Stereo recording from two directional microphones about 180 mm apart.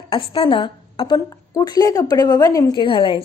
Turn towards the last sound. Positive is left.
turn(degrees=30)  # may be behind; listen again after turning